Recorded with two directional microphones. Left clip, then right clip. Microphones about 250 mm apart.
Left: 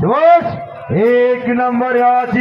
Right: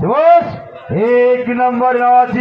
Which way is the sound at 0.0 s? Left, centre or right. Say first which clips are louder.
Even; left.